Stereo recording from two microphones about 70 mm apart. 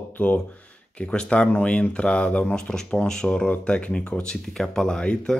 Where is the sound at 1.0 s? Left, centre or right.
Centre.